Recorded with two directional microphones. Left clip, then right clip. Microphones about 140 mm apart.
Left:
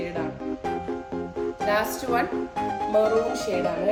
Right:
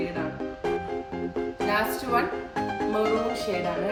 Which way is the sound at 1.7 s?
35° left (ahead or behind).